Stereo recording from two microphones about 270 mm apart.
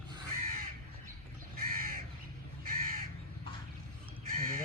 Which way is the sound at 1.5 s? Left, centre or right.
Right.